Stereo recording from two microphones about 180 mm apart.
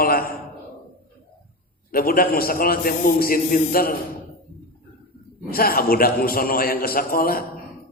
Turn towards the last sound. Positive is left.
turn(degrees=55)  # may be behind; listen again after turning